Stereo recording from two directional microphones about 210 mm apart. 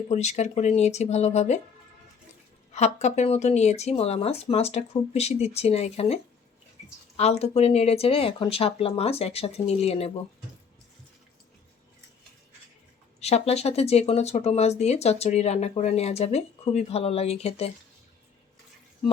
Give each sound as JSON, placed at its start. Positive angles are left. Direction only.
{"t": 0.1, "sound": "speech", "side_deg": 35}
{"t": 2.7, "sound": "speech", "side_deg": 30}
{"t": 7.2, "sound": "speech", "side_deg": 30}
{"t": 13.1, "sound": "speech", "side_deg": 30}